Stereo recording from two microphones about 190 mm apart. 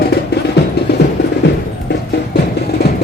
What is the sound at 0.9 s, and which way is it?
Music, 55° left (ahead or behind).